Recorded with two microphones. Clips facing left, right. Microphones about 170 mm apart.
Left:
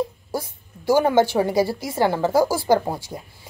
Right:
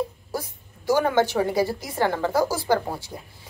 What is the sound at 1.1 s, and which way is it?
A woman's voice, 10° left (ahead or behind).